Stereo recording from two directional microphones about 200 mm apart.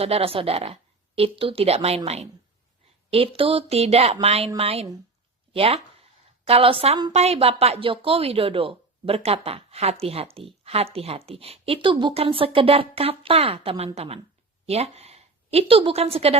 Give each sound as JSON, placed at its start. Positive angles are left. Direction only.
{"t": 0.0, "sound": "a woman's voice", "side_deg": -30}